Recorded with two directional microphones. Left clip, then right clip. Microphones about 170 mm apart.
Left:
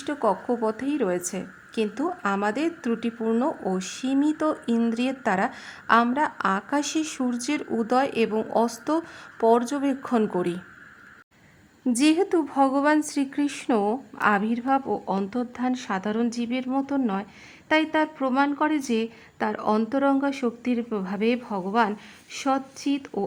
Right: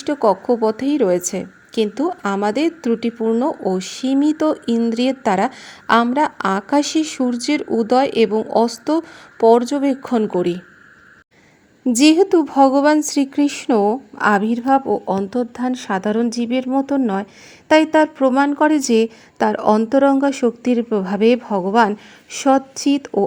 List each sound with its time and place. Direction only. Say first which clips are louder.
0.0 s a woman's voice: right 8 dB; 25° right (ahead or behind)
11.9 s a woman's voice: right 9 dB; 25° right (ahead or behind)